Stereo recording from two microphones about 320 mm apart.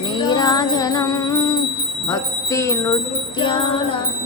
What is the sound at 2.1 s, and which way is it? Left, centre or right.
Speech, centre.